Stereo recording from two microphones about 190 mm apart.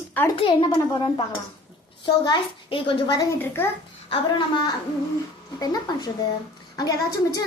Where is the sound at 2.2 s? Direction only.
25° left (ahead or behind).